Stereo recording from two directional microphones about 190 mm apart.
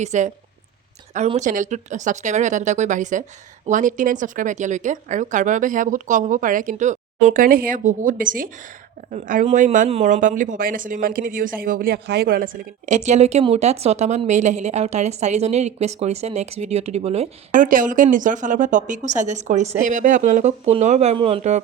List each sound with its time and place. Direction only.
0.0 s speech: 40° right (ahead or behind)